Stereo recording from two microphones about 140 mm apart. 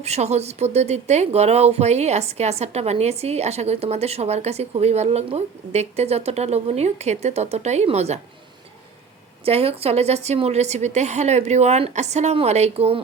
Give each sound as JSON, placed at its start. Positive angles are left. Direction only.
{"t": 0.0, "sound": "speech", "side_deg": -50}
{"t": 9.4, "sound": "speech", "side_deg": -45}